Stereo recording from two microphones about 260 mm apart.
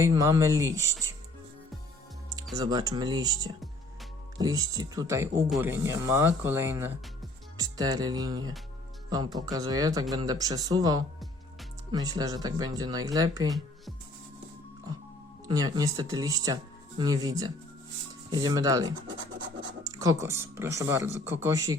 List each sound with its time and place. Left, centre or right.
0.0 s speech: centre
2.6 s speech: centre
15.4 s speech: centre